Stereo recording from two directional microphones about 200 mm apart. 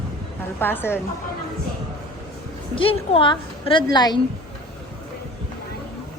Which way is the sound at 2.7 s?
25° left (ahead or behind).